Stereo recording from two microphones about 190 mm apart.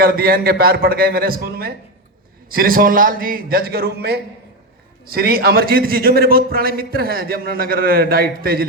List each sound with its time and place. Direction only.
0.0 s a man's voice: 50° right (ahead or behind)